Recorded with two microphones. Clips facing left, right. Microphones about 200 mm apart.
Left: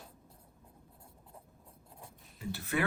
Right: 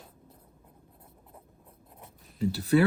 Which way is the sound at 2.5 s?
35° right (ahead or behind).